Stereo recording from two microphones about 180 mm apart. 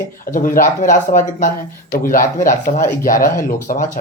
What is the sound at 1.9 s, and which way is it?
Speech, 55° left (ahead or behind).